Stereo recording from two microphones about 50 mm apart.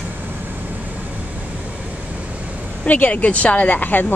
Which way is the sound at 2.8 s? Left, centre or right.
Left.